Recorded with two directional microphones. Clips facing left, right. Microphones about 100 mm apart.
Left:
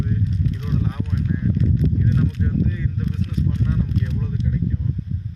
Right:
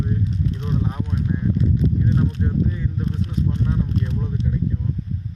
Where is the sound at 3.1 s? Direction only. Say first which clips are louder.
Even; 35° right (ahead or behind).